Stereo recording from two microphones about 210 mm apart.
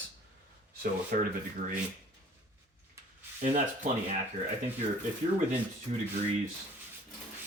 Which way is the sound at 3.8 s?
40° right (ahead or behind).